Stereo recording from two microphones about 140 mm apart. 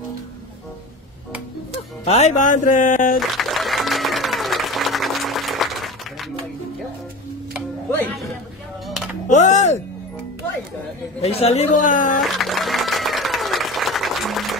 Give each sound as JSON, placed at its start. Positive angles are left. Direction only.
{"t": 2.0, "sound": "speech", "side_deg": 50}
{"t": 3.2, "sound": "applause", "side_deg": 0}
{"t": 9.3, "sound": "speech", "side_deg": 55}
{"t": 11.1, "sound": "speech", "side_deg": 45}
{"t": 12.2, "sound": "applause", "side_deg": 0}